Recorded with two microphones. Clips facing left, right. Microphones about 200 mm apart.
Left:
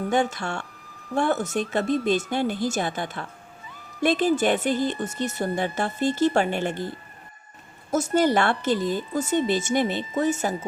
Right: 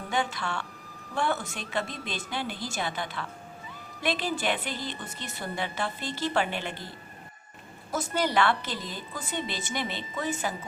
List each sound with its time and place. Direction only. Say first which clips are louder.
0.1 s a woman's voice: left 4 dB; 45° left (ahead or behind)